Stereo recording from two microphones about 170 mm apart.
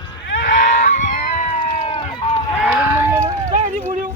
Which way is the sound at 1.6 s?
35° left (ahead or behind).